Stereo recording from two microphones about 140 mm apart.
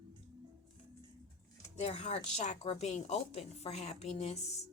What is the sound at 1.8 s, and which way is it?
A woman's voice, 50° left (ahead or behind).